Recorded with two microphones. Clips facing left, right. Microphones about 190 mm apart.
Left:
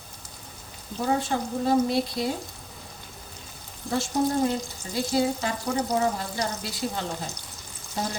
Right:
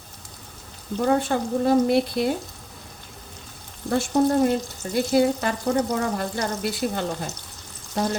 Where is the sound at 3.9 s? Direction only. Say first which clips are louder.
Right 5 dB; 60° right (ahead or behind).